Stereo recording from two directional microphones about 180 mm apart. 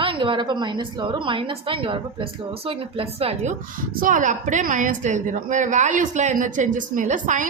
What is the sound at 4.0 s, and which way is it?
A woman's voice, 45° right (ahead or behind).